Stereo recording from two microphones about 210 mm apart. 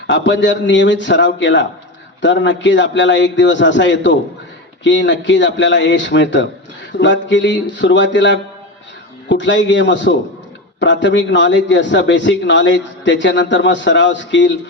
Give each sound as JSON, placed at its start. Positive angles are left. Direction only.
{"t": 0.1, "sound": "a man's voice", "side_deg": 60}